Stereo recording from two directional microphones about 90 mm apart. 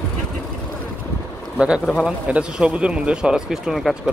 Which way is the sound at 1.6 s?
5° right (ahead or behind).